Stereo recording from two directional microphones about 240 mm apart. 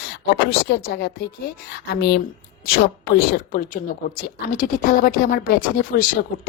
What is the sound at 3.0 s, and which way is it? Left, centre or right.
A woman's voice, left.